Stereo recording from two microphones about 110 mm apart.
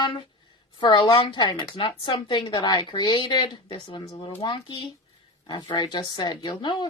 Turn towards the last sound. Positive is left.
turn(degrees=45)  # may be behind; listen again after turning